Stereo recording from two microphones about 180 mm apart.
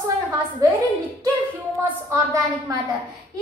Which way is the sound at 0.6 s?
20° right (ahead or behind).